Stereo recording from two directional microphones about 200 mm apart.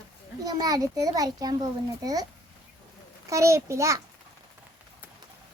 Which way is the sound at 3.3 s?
15° right (ahead or behind).